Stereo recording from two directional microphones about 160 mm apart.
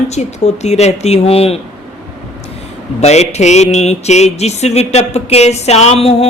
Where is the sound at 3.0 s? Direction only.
40° left (ahead or behind).